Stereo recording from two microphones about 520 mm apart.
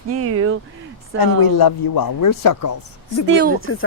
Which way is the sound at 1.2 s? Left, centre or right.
Left.